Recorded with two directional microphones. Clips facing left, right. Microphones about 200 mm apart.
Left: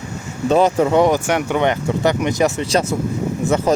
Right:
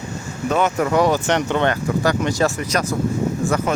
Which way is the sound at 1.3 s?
10° left (ahead or behind).